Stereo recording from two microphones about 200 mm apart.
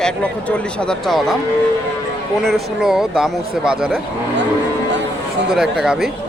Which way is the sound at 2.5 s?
Centre (ahead or behind).